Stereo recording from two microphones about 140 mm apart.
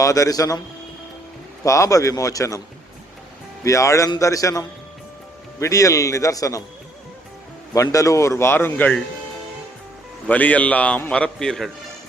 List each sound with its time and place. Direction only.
0.0 s a man's voice: 25° left (ahead or behind)
1.6 s a man's voice: 25° left (ahead or behind)
3.6 s a man's voice: 20° left (ahead or behind)
7.7 s a man's voice: 25° left (ahead or behind)
10.2 s a man's voice: 10° left (ahead or behind)